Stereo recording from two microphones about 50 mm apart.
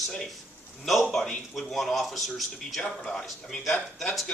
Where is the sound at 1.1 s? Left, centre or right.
Centre.